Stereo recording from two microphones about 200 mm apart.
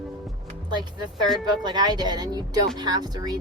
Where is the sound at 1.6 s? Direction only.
20° right (ahead or behind).